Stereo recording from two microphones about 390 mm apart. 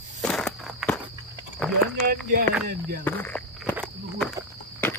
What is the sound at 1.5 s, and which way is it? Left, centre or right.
Speech, centre.